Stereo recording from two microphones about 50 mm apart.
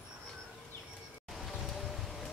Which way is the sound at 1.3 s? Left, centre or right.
Centre.